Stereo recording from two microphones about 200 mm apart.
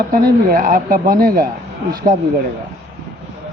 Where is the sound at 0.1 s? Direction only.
45° right (ahead or behind).